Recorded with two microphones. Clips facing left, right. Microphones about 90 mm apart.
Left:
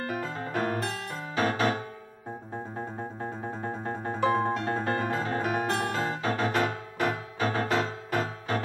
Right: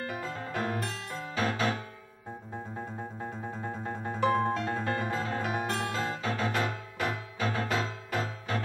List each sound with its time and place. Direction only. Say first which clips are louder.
0.0 s music: left 3 dB; 45° left (ahead or behind)
3.0 s music: left 3 dB; 30° left (ahead or behind)
3.8 s music: left 1 dB; 40° left (ahead or behind)
4.6 s music: left 3 dB; 40° left (ahead or behind)